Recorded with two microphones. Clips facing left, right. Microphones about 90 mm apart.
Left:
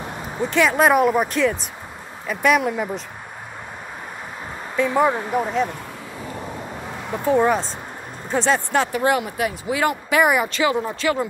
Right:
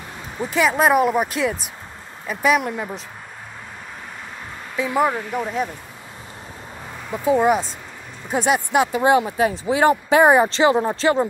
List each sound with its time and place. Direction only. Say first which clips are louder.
0.4 s speech: left 1 dB; 5° right (ahead or behind)
4.7 s speech: left 2 dB; 5° right (ahead or behind)
5.5 s speech: left 2 dB; 55° left (ahead or behind)
7.2 s speech: right 1 dB; 10° right (ahead or behind); by 11.2 s 30° right (ahead or behind)